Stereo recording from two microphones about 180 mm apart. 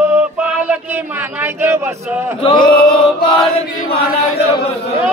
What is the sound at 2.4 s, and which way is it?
Chant, 25° left (ahead or behind).